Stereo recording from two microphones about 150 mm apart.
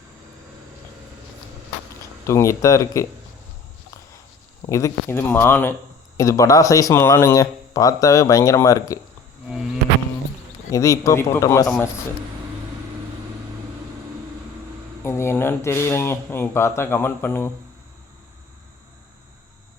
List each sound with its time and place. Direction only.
2.2 s speech: 20° left (ahead or behind)
4.7 s speech: 15° left (ahead or behind)
10.7 s speech: 20° left (ahead or behind)
15.0 s speech: 15° left (ahead or behind)